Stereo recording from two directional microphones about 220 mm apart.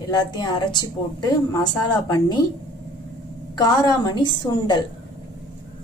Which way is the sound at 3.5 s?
15° left (ahead or behind).